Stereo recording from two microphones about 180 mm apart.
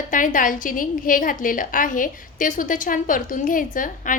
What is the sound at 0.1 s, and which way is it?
A woman's voice, 45° left (ahead or behind).